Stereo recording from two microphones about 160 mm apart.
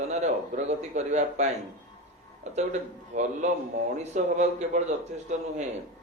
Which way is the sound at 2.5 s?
45° right (ahead or behind).